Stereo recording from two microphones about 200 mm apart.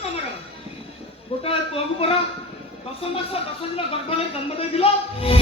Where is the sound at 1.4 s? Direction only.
30° left (ahead or behind).